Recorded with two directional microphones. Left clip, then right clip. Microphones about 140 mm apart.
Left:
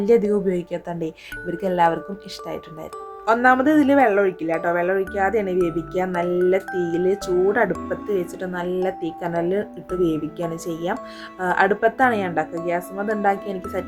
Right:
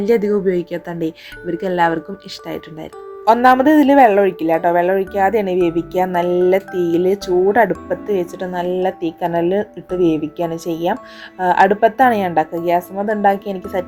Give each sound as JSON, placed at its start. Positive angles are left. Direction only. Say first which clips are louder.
{"t": 0.0, "sound": "speech", "louder": "right 2 dB", "side_deg": -20}
{"t": 3.2, "sound": "speech", "louder": "right 6 dB", "side_deg": -25}